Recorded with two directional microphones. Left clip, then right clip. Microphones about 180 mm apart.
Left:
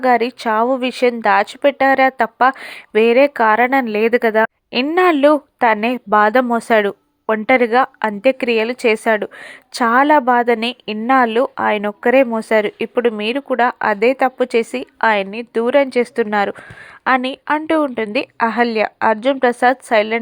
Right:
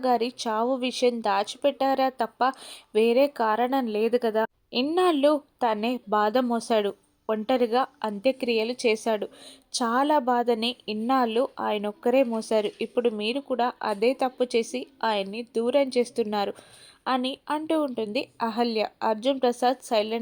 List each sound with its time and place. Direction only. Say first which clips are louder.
0.0 s speech: left 10 dB; 20° left (ahead or behind)